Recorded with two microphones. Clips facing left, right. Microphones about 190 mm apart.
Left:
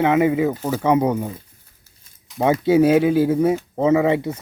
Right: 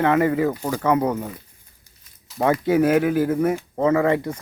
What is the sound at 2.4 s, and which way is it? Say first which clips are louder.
Speech: left 3 dB; 20° left (ahead or behind).